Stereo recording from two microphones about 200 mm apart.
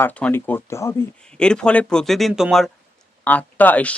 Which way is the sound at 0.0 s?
10° left (ahead or behind).